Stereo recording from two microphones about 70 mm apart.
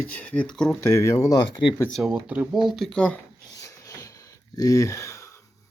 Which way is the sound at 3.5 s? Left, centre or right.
Left.